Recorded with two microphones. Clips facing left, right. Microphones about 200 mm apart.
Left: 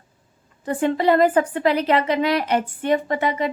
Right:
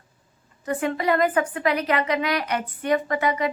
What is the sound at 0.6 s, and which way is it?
A woman's voice, 30° left (ahead or behind).